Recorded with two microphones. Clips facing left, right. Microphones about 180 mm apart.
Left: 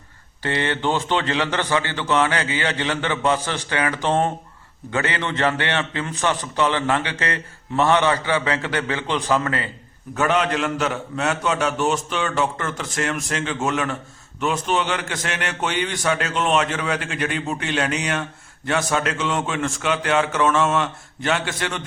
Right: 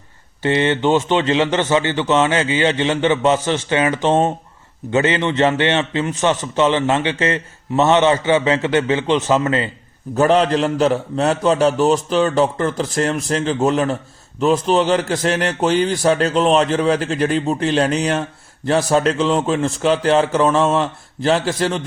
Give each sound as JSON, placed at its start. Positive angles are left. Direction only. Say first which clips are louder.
{"t": 0.4, "sound": "a man's voice", "louder": "right 6 dB", "side_deg": -20}
{"t": 10.2, "sound": "a man's voice", "louder": "right 6 dB", "side_deg": -35}